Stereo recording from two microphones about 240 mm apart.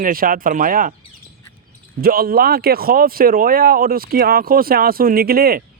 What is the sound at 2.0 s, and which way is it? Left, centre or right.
Speech, right.